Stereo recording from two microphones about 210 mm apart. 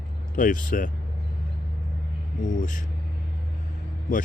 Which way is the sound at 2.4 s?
40° left (ahead or behind).